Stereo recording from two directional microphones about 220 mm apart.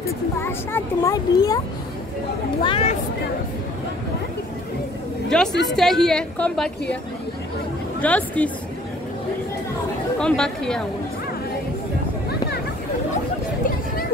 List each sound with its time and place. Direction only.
0.0 s speech: 10° left (ahead or behind)
2.6 s speech: 25° left (ahead or behind)
5.3 s a woman's voice: 5° left (ahead or behind)
8.0 s speech: 5° left (ahead or behind)
10.2 s a woman's voice: 5° left (ahead or behind)